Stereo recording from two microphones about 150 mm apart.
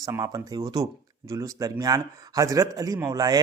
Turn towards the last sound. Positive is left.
turn(degrees=-25)  # may be behind; listen again after turning